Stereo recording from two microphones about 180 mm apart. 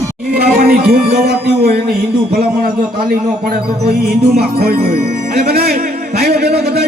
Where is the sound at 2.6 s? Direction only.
55° right (ahead or behind).